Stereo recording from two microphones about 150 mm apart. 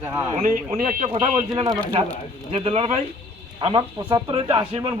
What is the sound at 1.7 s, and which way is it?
Speech, 10° left (ahead or behind).